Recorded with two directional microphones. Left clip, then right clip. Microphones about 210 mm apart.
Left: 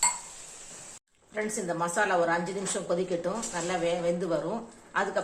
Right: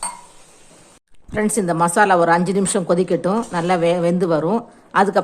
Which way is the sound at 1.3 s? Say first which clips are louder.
Right 12 dB; 45° right (ahead or behind).